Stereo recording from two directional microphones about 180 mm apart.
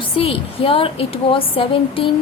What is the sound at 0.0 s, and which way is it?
A woman's voice, 30° left (ahead or behind).